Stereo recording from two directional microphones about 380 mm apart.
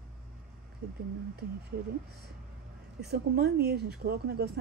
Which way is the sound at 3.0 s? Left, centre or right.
Right.